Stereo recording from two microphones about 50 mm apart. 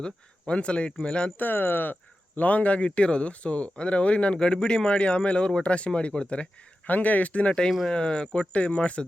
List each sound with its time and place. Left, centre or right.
0.0 s speech: left
1.4 s speech: left
6.8 s speech: left
7.9 s speech: centre